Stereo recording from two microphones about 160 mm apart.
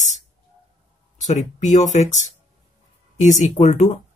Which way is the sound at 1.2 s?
45° left (ahead or behind).